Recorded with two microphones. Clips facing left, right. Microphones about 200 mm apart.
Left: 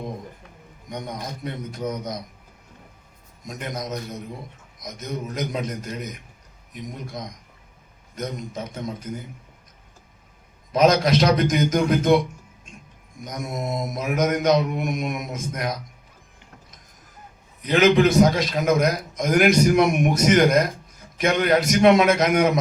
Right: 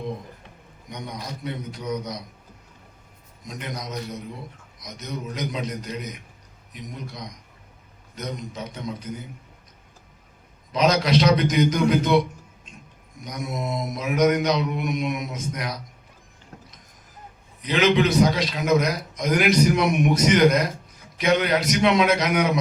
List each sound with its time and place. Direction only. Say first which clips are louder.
0.9 s a man's voice: left 2 dB; 50° left (ahead or behind)
3.4 s a man's voice: left 3 dB; 50° left (ahead or behind)
10.7 s a man's voice: left 3 dB; 50° left (ahead or behind)
13.2 s a man's voice: even; 50° left (ahead or behind)
17.6 s a man's voice: left 3 dB; 50° left (ahead or behind)